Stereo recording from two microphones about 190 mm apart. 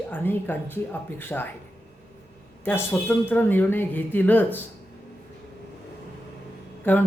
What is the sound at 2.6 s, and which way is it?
Speech, 10° left (ahead or behind).